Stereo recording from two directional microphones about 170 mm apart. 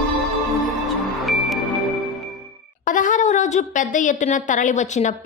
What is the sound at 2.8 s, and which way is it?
A woman's voice, 50° left (ahead or behind).